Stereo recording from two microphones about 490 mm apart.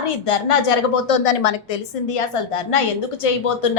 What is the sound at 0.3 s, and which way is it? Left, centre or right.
A woman's voice, left.